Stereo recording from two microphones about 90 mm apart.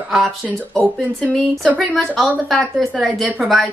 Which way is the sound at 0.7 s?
10° left (ahead or behind).